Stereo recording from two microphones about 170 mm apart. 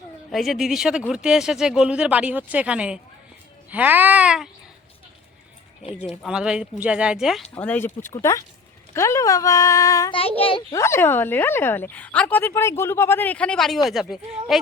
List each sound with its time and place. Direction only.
0.3 s speech: centre (ahead or behind)
6.2 s speech: 5° right (ahead or behind)
7.5 s speech: 10° left (ahead or behind)
10.2 s a child's voice: 35° left (ahead or behind)
10.7 s speech: 15° left (ahead or behind); by 14.6 s centre (ahead or behind)